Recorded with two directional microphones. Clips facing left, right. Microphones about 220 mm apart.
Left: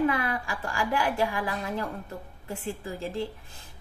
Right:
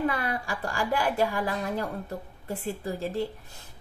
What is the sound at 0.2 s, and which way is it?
A woman's voice, 35° right (ahead or behind).